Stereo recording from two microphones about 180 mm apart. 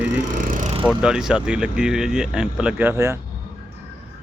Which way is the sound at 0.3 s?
50° right (ahead or behind).